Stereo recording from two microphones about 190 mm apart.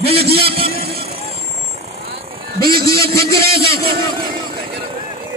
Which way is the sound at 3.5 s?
55° right (ahead or behind).